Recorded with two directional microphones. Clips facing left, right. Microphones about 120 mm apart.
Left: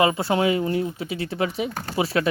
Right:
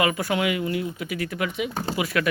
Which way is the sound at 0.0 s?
25° left (ahead or behind).